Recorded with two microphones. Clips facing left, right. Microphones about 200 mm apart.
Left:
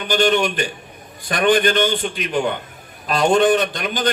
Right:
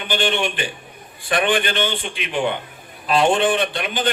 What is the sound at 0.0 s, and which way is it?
A man's voice, 40° left (ahead or behind).